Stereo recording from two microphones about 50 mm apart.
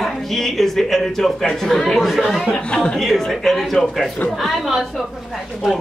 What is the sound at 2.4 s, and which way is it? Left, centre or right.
Speech, left.